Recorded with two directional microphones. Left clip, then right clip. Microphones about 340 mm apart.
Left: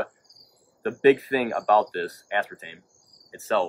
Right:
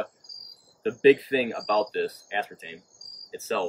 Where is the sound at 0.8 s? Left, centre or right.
Centre.